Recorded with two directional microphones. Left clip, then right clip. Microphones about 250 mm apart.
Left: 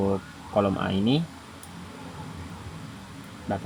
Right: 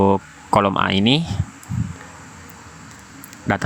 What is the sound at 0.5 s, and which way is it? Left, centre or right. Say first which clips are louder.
Speech: right 9 dB; right.